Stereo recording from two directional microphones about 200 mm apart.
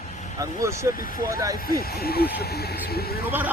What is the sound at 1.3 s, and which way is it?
Speech, 15° right (ahead or behind).